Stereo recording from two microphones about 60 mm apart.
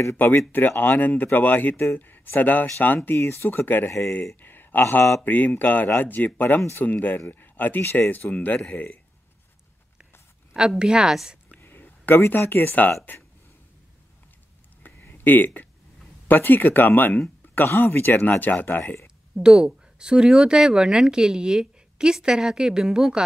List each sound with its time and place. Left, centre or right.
0.5 s speech: left
3.2 s speech: left
3.4 s speech: left
7.8 s speech: left
8.3 s speech: left
10.8 s speech: centre
11.6 s speech: left
14.8 s a sound: left
16.3 s speech: left
19.3 s speech: centre